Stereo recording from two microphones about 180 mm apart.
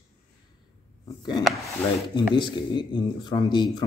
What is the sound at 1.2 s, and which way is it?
Speech, 25° left (ahead or behind).